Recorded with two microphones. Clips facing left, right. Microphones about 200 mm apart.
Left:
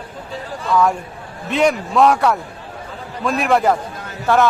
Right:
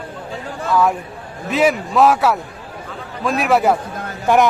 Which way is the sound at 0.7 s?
5° right (ahead or behind).